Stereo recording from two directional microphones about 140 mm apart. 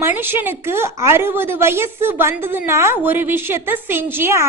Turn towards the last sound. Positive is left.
turn(degrees=-20)  # may be behind; listen again after turning